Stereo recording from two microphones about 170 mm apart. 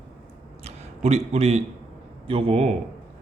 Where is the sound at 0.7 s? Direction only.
40° right (ahead or behind).